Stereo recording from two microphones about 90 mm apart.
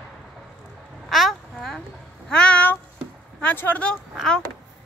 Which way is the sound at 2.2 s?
10° left (ahead or behind).